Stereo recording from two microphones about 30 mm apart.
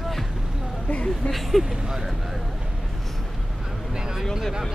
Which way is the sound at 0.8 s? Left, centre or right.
Left.